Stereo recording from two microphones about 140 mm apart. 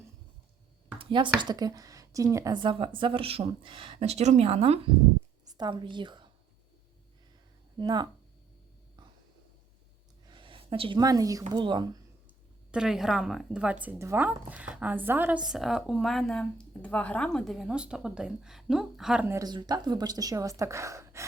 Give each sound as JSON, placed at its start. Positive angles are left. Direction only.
{"t": 0.9, "sound": "a sound", "side_deg": -35}
{"t": 1.4, "sound": "speech", "side_deg": -30}
{"t": 5.5, "sound": "a woman's voice", "side_deg": -30}
{"t": 7.8, "sound": "speech", "side_deg": -30}
{"t": 10.2, "sound": "speech", "side_deg": -35}
{"t": 12.7, "sound": "speech", "side_deg": -5}
{"t": 15.4, "sound": "speech", "side_deg": -5}
{"t": 19.2, "sound": "speech", "side_deg": -20}
{"t": 19.5, "sound": "speech", "side_deg": -30}